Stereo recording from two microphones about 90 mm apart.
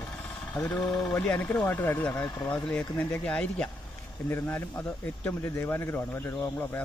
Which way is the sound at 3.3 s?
10° left (ahead or behind).